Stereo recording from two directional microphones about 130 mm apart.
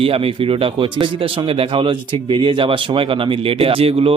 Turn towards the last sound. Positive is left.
turn(degrees=-45)  # may be behind; listen again after turning